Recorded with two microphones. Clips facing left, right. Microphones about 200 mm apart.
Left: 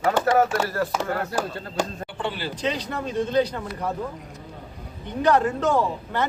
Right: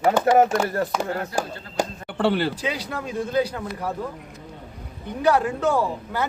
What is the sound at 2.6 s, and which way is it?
A man's voice, 10° right (ahead or behind).